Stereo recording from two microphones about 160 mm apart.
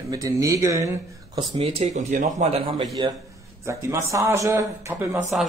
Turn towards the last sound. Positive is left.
turn(degrees=-20)  # may be behind; listen again after turning